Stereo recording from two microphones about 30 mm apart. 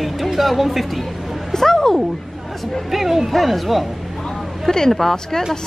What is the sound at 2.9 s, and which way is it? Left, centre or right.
Speech, centre.